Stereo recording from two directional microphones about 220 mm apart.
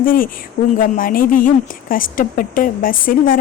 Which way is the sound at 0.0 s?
40° left (ahead or behind).